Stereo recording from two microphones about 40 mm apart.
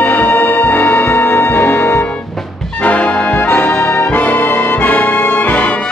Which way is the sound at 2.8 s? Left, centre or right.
Left.